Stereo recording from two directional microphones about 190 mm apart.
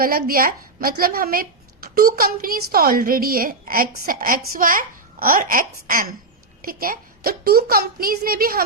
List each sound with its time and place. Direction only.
0.0 s a woman's voice: 50° right (ahead or behind)